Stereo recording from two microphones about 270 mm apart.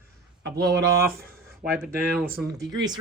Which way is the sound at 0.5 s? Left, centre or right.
Right.